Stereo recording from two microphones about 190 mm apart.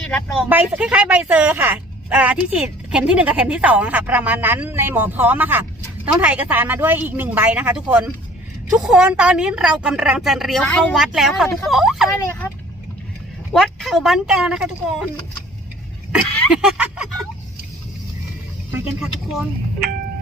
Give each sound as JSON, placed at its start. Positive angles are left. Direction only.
{"t": 0.0, "sound": "speech", "side_deg": 5}
{"t": 0.4, "sound": "a woman's voice", "side_deg": -10}
{"t": 13.5, "sound": "a woman's voice", "side_deg": 0}
{"t": 16.5, "sound": "a woman's voice", "side_deg": -5}